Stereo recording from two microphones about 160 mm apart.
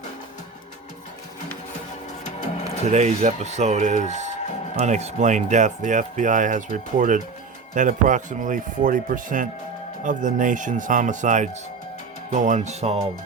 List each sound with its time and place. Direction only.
2.8 s speech: 45° right (ahead or behind)